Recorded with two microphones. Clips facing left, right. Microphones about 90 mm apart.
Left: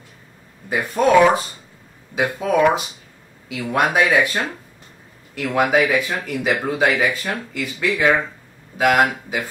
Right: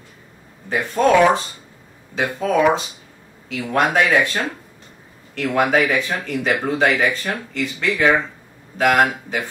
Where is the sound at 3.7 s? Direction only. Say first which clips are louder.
Even; 15° left (ahead or behind).